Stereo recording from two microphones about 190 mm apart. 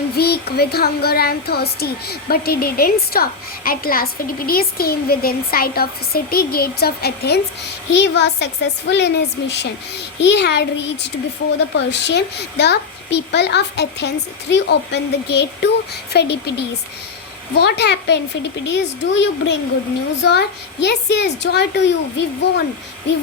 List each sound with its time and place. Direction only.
0.2 s a woman's voice: 55° left (ahead or behind); by 19.5 s 70° left (ahead or behind)
20.8 s a woman's voice: 60° left (ahead or behind)